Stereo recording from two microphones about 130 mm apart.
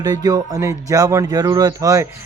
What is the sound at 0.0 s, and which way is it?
A man's voice, 30° right (ahead or behind).